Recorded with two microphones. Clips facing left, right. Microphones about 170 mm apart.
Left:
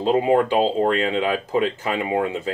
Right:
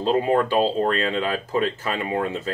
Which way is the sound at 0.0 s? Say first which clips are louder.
Left 2 dB; 15° left (ahead or behind).